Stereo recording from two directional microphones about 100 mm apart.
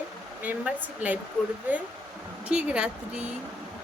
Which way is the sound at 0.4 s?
15° right (ahead or behind).